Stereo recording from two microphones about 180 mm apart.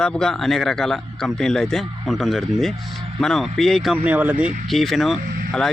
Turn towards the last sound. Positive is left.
turn(degrees=-55)  # may be behind; listen again after turning